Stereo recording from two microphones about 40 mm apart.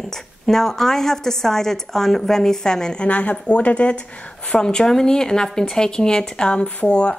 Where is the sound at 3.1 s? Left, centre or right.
Left.